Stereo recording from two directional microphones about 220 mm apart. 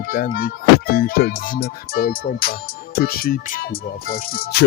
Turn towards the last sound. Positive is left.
turn(degrees=40)  # may be behind; listen again after turning